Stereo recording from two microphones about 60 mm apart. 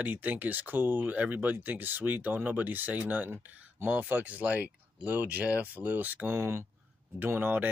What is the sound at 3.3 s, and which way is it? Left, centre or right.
Speech, right.